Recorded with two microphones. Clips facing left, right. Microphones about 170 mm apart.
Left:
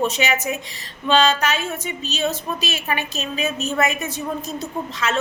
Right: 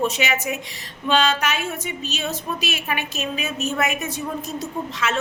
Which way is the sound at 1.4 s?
10° right (ahead or behind).